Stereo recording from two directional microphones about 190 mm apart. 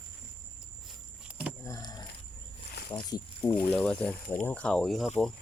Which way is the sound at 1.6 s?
20° left (ahead or behind).